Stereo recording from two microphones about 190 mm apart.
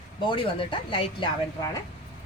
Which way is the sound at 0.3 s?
25° left (ahead or behind).